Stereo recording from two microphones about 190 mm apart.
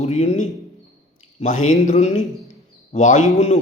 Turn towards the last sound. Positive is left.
turn(degrees=40)  # may be behind; listen again after turning